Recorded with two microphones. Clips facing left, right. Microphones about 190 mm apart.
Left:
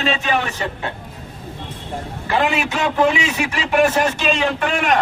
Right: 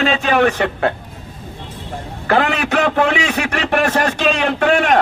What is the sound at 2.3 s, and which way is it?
A man's voice, 60° right (ahead or behind).